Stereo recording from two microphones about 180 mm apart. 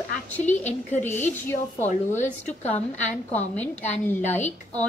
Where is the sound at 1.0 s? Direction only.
10° left (ahead or behind).